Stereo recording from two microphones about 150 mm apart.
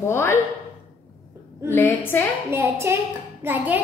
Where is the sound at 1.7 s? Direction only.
15° left (ahead or behind).